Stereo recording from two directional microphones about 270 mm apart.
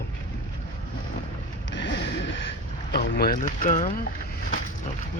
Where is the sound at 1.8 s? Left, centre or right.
Left.